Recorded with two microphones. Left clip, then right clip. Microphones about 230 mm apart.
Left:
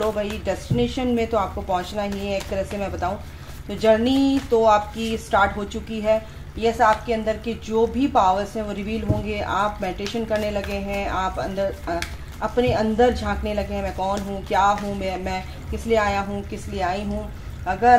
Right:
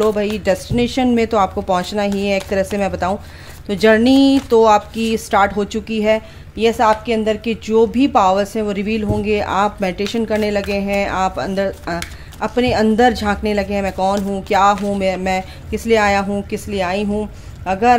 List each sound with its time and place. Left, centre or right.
0.0 s speech: right